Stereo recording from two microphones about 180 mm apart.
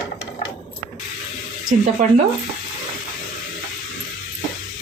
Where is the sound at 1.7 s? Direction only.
40° right (ahead or behind).